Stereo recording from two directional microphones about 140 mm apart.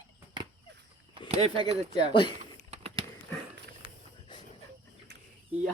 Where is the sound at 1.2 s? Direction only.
45° right (ahead or behind).